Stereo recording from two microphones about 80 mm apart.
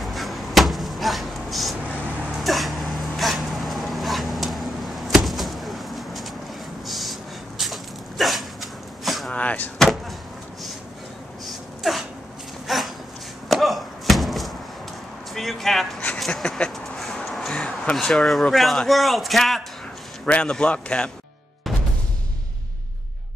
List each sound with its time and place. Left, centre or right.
0.0 s a sound: centre
9.3 s door: centre
9.8 s slam: centre
11.4 s sneeze: centre
12.6 s a sound: centre
13.5 s chop: centre
15.3 s a sound: centre
17.6 s speech: centre
20.2 s a man's voice: centre